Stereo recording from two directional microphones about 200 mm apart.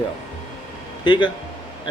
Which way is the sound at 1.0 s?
25° left (ahead or behind).